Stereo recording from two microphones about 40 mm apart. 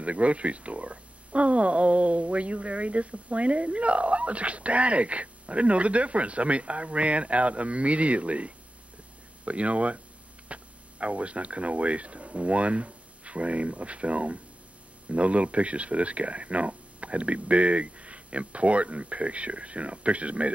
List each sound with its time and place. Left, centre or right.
0.0 s speech: right